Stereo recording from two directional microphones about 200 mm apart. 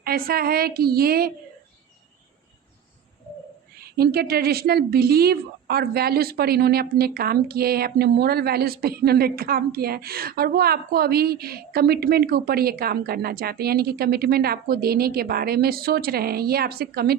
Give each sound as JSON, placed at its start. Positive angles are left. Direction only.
{"t": 0.0, "sound": "a woman's voice", "side_deg": -50}
{"t": 3.9, "sound": "a woman's voice", "side_deg": -50}